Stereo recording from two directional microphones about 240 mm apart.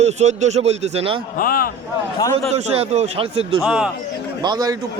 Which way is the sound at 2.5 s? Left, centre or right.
Right.